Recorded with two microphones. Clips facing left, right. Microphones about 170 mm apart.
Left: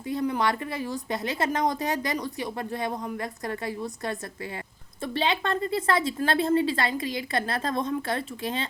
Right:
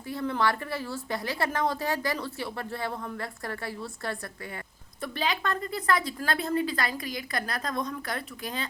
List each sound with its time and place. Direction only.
0.1 s a woman's voice: 20° left (ahead or behind)